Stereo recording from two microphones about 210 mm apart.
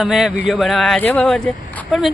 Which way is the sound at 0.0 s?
Centre (ahead or behind).